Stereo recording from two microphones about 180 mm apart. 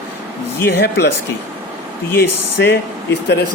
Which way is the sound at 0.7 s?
65° left (ahead or behind).